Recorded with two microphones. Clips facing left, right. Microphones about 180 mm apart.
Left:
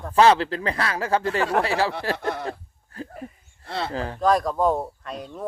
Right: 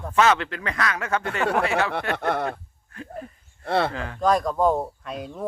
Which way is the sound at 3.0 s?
35° left (ahead or behind).